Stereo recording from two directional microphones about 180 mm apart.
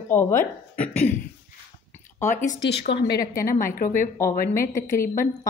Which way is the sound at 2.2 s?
45° left (ahead or behind).